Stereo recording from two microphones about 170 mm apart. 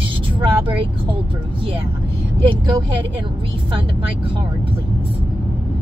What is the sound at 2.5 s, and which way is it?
Speech, 30° right (ahead or behind).